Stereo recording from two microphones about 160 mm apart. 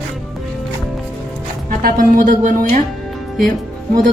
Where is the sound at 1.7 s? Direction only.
60° right (ahead or behind).